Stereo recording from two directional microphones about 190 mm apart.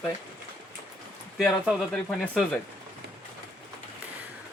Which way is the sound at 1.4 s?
Centre (ahead or behind).